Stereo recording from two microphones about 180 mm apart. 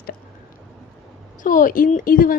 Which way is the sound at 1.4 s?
50° left (ahead or behind).